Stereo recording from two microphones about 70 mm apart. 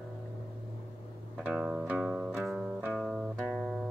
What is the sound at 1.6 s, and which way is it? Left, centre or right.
Music, centre.